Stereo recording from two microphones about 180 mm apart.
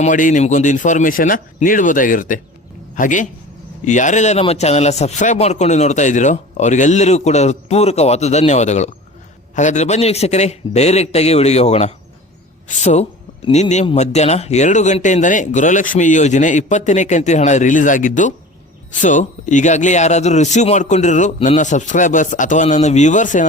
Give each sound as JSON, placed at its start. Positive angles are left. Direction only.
{"t": 0.0, "sound": "a man's voice", "side_deg": 45}